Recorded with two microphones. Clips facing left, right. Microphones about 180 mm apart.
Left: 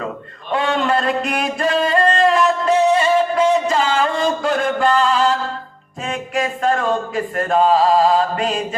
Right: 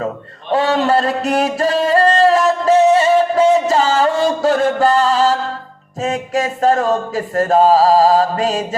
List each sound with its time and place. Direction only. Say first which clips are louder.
0.5 s music: right 4 dB; 40° right (ahead or behind)